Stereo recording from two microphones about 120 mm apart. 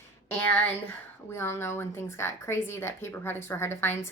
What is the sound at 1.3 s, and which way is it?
A woman's voice, 20° left (ahead or behind).